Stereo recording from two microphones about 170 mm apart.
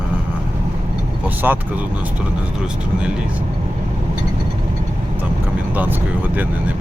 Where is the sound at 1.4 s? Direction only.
10° right (ahead or behind).